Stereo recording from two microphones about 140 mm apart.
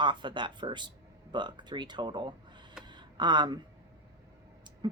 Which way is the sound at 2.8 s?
30° right (ahead or behind).